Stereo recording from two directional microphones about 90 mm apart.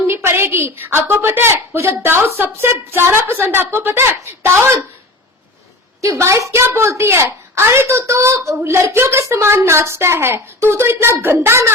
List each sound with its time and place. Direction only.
0.1 s a woman's voice: 25° right (ahead or behind)
6.0 s a woman's voice: 35° right (ahead or behind)